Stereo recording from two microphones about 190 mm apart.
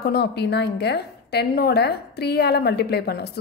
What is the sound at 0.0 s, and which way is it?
A woman's voice, 60° left (ahead or behind).